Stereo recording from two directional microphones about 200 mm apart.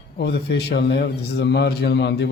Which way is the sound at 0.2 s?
55° left (ahead or behind).